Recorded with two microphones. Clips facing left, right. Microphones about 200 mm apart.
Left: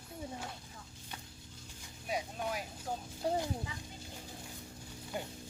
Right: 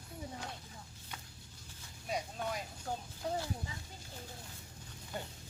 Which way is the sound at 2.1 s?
5° left (ahead or behind).